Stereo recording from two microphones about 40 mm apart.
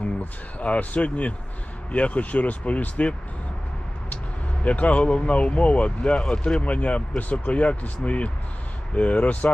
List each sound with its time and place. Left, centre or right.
0.0 s speech: left
4.6 s speech: left